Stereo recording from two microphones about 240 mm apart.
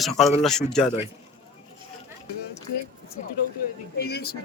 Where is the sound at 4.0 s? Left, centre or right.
Left.